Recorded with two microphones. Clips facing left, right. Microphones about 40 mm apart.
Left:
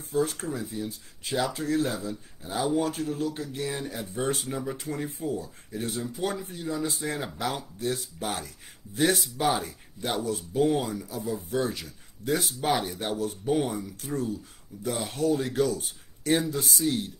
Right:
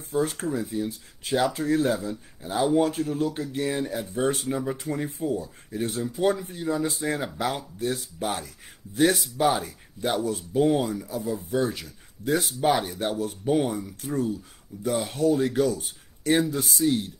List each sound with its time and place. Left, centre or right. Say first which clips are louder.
0.1 s speech: right 2 dB; right
3.9 s speech: right 4 dB; centre
14.2 s speech: right 3 dB; centre
14.9 s speech: right 3 dB; centre